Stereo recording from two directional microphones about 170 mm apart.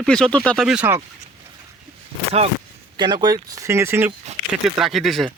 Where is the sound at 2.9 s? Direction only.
25° right (ahead or behind).